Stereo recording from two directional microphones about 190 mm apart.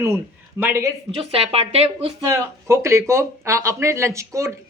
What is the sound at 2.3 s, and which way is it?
A man's voice, 15° right (ahead or behind).